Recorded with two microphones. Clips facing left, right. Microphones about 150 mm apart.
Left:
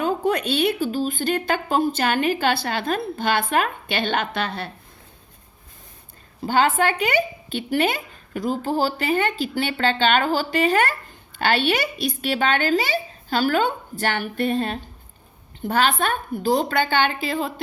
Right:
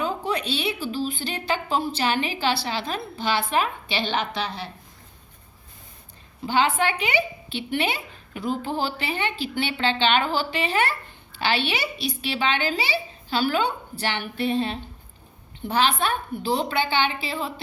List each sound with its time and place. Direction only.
0.0 s a woman's voice: 50° left (ahead or behind)
6.4 s a woman's voice: 45° left (ahead or behind)